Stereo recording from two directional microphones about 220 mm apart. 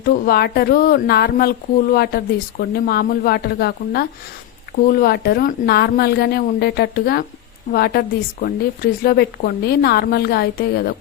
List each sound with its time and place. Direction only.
0.0 s speech: 45° left (ahead or behind)